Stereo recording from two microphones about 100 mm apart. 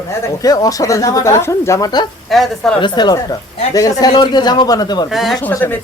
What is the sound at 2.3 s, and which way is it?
Speech, centre (ahead or behind).